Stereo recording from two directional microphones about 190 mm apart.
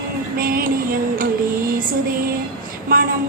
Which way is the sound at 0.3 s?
50° right (ahead or behind).